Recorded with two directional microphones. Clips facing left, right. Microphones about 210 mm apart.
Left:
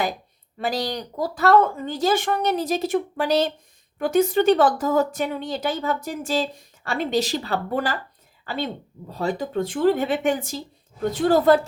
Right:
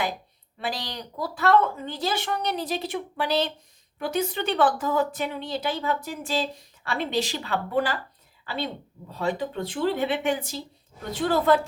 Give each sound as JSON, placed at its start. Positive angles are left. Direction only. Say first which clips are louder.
{"t": 0.6, "sound": "speech", "louder": "left 7 dB", "side_deg": 45}